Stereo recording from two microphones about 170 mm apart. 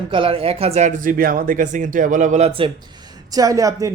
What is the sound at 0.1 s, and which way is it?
Speech, 30° right (ahead or behind).